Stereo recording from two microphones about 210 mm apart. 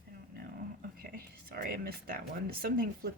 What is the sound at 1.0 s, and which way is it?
Speech, 45° right (ahead or behind).